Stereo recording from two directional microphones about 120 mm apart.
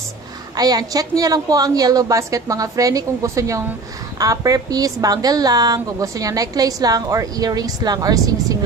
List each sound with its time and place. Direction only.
0.6 s a woman's voice: 30° right (ahead or behind)